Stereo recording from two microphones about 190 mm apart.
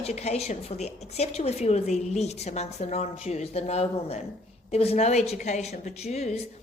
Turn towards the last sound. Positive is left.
turn(degrees=35)  # may be behind; listen again after turning